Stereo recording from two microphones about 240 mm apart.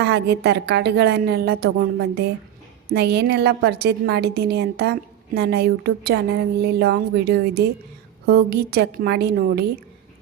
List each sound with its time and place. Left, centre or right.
0.0 s a woman's voice: right